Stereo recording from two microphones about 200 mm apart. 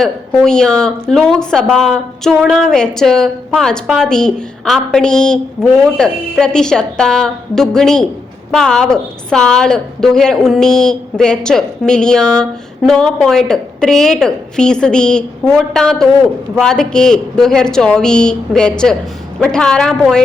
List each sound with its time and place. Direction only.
0.0 s a woman's voice: 5° left (ahead or behind)